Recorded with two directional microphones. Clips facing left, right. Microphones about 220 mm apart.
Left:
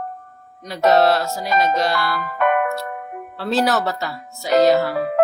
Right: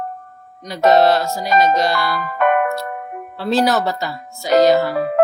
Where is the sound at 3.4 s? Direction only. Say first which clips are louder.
Right 2 dB; centre (ahead or behind).